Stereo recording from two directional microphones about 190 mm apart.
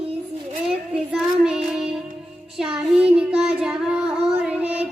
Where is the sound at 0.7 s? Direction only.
5° right (ahead or behind).